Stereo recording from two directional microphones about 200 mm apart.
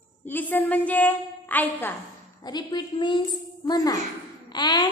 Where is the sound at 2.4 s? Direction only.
20° left (ahead or behind).